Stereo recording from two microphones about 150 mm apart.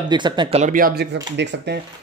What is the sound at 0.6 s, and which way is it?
Speech, 65° right (ahead or behind).